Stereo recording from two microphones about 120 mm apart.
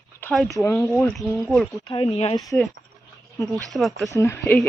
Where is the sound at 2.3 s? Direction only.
30° left (ahead or behind).